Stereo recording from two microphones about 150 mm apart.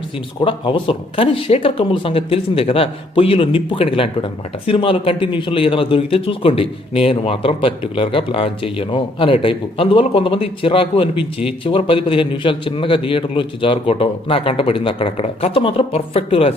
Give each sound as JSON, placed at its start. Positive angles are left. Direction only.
{"t": 0.4, "sound": "speech", "side_deg": 35}